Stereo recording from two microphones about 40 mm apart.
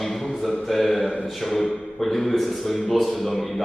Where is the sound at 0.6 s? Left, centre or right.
Centre.